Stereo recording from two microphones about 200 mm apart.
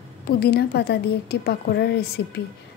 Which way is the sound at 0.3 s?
55° left (ahead or behind).